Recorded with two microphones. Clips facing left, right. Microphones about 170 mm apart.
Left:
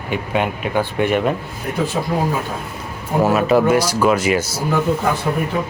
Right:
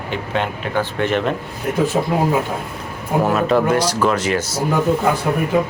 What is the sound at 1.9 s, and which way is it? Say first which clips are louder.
Speech: right 3 dB; 30° right (ahead or behind).